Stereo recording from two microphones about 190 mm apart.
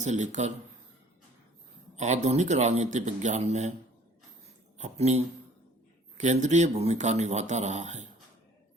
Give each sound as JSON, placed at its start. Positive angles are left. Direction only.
{"t": 0.0, "sound": "speech", "side_deg": -40}
{"t": 2.0, "sound": "speech", "side_deg": -40}
{"t": 4.8, "sound": "speech", "side_deg": -35}